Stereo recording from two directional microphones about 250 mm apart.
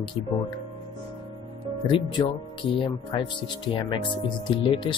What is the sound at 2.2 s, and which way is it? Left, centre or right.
Speech, centre.